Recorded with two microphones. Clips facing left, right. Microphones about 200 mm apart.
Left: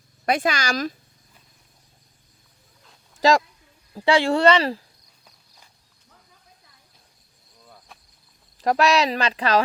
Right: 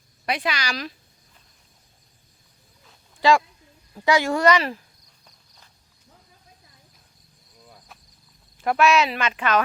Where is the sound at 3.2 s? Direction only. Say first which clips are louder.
Left 1 dB; 40° left (ahead or behind).